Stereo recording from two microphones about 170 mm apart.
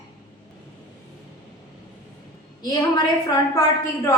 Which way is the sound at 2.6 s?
25° left (ahead or behind).